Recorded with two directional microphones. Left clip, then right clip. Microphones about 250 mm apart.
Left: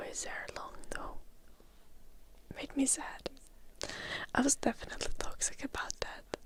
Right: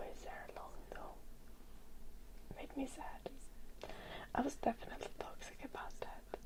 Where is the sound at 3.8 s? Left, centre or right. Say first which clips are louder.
Left 10 dB; left.